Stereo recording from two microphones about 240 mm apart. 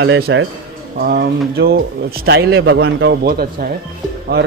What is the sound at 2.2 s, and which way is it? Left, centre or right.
Speech, right.